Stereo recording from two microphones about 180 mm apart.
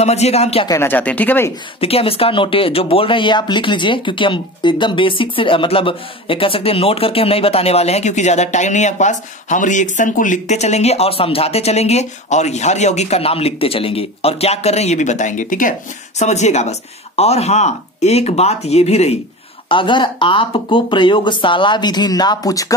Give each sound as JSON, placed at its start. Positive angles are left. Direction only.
{"t": 0.0, "sound": "speech", "side_deg": 35}
{"t": 0.7, "sound": "speech", "side_deg": 15}
{"t": 1.8, "sound": "speech", "side_deg": 35}